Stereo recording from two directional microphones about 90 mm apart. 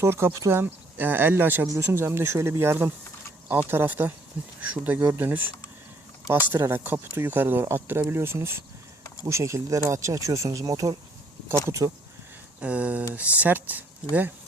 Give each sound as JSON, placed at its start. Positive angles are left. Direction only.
{"t": 0.0, "sound": "speech", "side_deg": -30}
{"t": 1.6, "sound": "speech", "side_deg": -35}
{"t": 4.9, "sound": "speech", "side_deg": -35}
{"t": 5.2, "sound": "speech", "side_deg": -20}
{"t": 12.5, "sound": "speech", "side_deg": -15}